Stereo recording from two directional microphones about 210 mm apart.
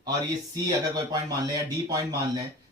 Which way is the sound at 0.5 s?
15° right (ahead or behind).